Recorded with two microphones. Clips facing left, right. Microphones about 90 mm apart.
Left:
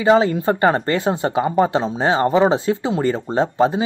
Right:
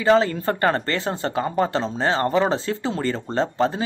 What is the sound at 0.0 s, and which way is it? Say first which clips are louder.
Speech: left 3 dB; 15° left (ahead or behind).